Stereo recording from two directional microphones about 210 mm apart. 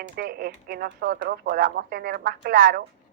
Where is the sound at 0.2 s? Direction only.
45° right (ahead or behind).